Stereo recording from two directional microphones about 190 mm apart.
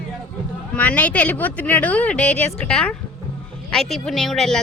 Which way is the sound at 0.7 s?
10° left (ahead or behind).